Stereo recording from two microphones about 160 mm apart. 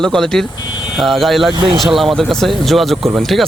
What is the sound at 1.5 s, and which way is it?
Speech, 35° right (ahead or behind).